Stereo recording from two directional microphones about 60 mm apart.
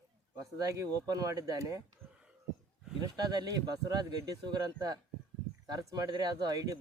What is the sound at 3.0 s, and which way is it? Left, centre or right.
Speech, right.